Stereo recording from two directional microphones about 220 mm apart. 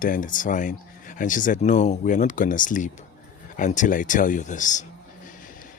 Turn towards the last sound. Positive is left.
turn(degrees=35)  # may be behind; listen again after turning